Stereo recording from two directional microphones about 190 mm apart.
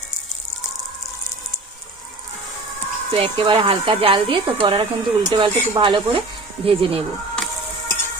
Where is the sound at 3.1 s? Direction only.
30° right (ahead or behind).